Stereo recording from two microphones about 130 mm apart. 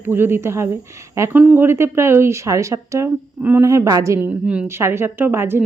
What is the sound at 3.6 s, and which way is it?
Speech, 25° right (ahead or behind).